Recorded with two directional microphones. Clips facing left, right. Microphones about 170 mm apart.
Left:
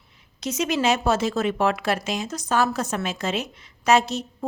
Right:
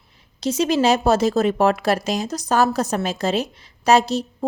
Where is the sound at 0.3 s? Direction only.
30° right (ahead or behind).